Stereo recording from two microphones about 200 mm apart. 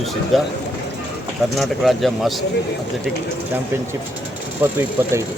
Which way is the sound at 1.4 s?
Centre (ahead or behind).